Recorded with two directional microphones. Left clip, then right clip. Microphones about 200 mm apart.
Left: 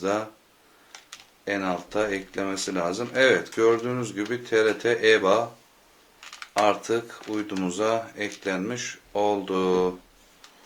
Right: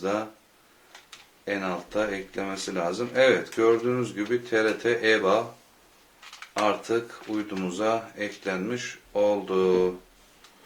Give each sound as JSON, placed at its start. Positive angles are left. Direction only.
{"t": 0.0, "sound": "speech", "side_deg": 35}
{"t": 1.5, "sound": "speech", "side_deg": 35}